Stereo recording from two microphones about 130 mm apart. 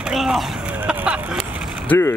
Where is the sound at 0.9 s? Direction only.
10° right (ahead or behind).